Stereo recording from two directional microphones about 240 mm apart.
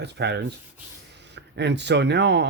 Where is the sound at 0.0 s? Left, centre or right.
Right.